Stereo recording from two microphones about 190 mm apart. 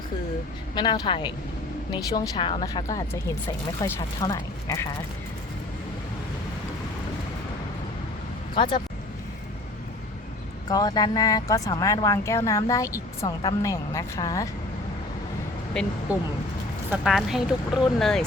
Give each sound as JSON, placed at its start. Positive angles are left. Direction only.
{"t": 0.8, "sound": "speech", "side_deg": 25}
{"t": 8.5, "sound": "speech", "side_deg": 25}
{"t": 10.7, "sound": "speech", "side_deg": 20}
{"t": 16.9, "sound": "speech", "side_deg": 0}